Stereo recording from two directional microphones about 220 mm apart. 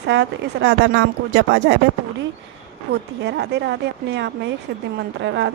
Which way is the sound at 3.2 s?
50° right (ahead or behind).